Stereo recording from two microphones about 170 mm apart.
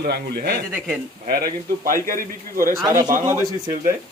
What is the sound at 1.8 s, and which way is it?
A man's voice, 55° right (ahead or behind).